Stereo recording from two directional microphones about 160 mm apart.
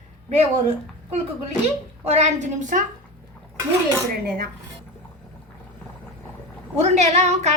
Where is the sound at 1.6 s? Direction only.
45° right (ahead or behind).